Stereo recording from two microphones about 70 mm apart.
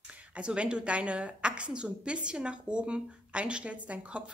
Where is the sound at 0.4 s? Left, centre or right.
Centre.